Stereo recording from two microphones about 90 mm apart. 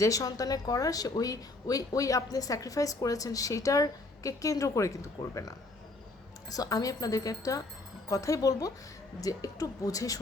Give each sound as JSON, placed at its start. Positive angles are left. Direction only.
{"t": 0.0, "sound": "speech", "side_deg": 40}